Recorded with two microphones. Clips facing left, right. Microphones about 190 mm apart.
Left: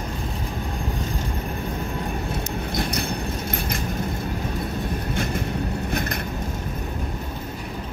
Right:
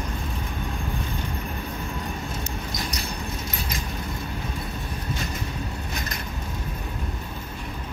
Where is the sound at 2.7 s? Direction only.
55° left (ahead or behind).